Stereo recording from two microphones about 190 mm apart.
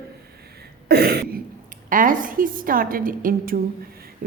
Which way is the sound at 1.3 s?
45° right (ahead or behind).